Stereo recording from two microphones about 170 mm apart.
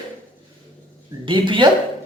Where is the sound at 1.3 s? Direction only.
30° right (ahead or behind).